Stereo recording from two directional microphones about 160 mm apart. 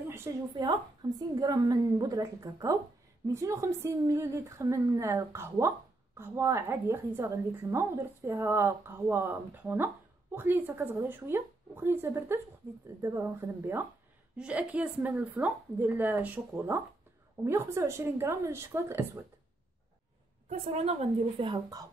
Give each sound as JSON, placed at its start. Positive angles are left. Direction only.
{"t": 0.5, "sound": "a woman's voice", "side_deg": -30}
{"t": 20.4, "sound": "a woman's voice", "side_deg": -45}